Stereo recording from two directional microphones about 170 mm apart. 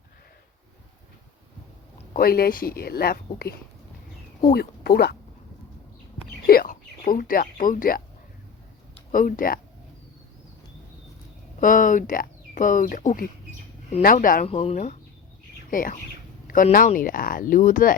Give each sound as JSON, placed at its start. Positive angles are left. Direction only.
{"t": 2.1, "sound": "speech", "side_deg": 65}
{"t": 6.5, "sound": "speech", "side_deg": 55}
{"t": 9.1, "sound": "speech", "side_deg": 50}
{"t": 11.6, "sound": "speech", "side_deg": 50}
{"t": 14.4, "sound": "speech", "side_deg": 35}
{"t": 15.7, "sound": "speech", "side_deg": 55}